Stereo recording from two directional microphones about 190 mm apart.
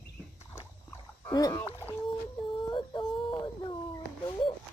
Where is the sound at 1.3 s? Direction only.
20° left (ahead or behind).